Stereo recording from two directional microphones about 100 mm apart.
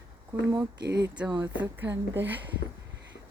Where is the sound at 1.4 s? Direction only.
20° right (ahead or behind).